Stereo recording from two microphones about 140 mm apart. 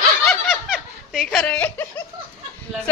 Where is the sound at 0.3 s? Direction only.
Centre (ahead or behind).